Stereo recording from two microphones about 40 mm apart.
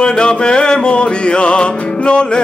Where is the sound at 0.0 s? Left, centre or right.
Left.